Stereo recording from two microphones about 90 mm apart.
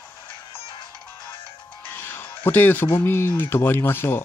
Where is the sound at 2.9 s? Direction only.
25° left (ahead or behind).